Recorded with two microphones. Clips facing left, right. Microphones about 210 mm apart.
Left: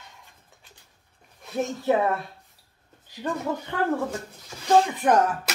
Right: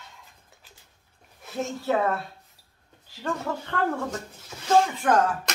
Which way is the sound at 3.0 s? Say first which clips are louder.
Left 2 dB; 15° left (ahead or behind).